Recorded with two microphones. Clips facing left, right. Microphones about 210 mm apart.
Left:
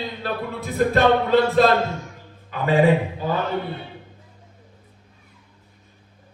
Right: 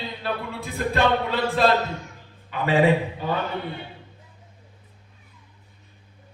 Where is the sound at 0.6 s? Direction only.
50° left (ahead or behind).